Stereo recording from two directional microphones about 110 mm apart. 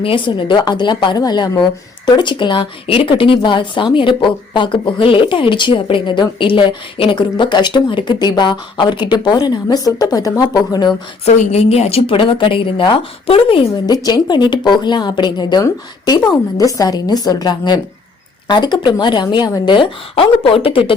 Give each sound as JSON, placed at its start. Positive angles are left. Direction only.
{"t": 0.0, "sound": "speech", "side_deg": 50}
{"t": 11.3, "sound": "speech", "side_deg": 75}
{"t": 13.8, "sound": "a woman's voice", "side_deg": 35}